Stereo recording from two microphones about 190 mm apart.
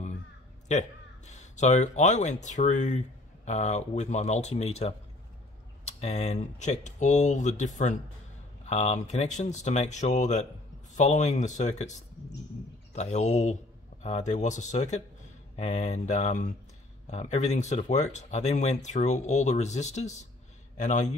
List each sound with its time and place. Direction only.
0.7 s speech: 40° left (ahead or behind)
12.9 s speech: 35° left (ahead or behind)